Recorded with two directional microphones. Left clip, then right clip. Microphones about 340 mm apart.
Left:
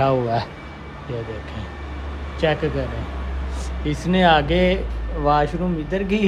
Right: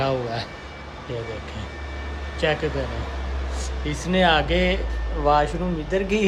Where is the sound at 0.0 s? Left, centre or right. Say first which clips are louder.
Left 5 dB; centre.